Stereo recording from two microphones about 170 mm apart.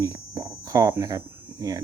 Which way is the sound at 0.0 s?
20° right (ahead or behind).